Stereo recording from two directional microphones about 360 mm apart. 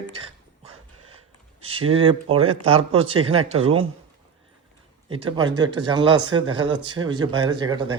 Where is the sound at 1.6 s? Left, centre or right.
Centre.